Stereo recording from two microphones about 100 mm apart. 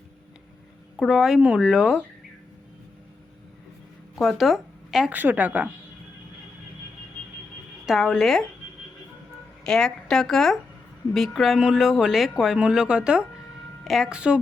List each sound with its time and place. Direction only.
0.9 s speech: 5° right (ahead or behind)
4.1 s speech: 5° right (ahead or behind)
5.1 s speech: 15° right (ahead or behind)
7.9 s speech: 5° right (ahead or behind)
9.6 s speech: 5° left (ahead or behind)
14.2 s speech: 10° right (ahead or behind)